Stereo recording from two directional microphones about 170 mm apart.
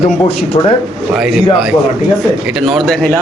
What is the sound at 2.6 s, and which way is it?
Speech, centre (ahead or behind).